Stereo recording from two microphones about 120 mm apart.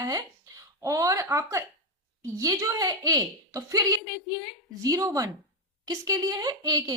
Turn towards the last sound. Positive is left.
turn(degrees=-30)  # may be behind; listen again after turning